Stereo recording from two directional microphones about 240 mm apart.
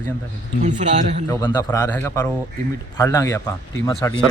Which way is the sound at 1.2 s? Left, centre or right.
Centre.